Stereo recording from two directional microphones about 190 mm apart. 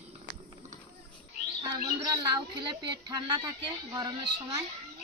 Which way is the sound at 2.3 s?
25° right (ahead or behind).